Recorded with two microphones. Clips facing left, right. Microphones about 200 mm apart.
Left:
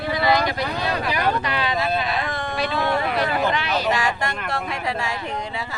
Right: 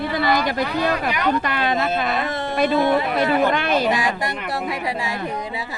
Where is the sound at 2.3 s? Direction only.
25° right (ahead or behind).